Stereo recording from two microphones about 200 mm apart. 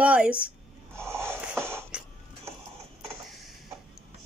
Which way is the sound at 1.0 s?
10° right (ahead or behind).